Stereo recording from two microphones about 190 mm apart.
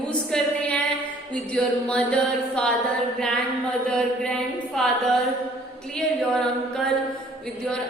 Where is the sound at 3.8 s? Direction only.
5° left (ahead or behind).